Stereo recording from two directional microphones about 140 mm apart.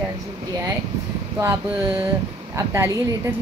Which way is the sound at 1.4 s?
20° right (ahead or behind).